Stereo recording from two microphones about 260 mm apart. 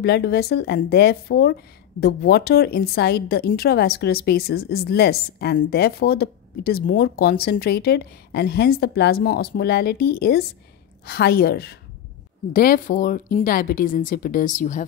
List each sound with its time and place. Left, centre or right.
0.0 s speech: left